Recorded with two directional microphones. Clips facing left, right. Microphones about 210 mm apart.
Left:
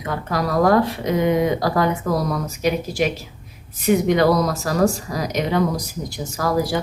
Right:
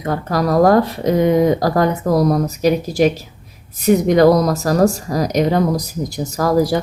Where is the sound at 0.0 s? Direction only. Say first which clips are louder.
Right 5 dB; 40° right (ahead or behind).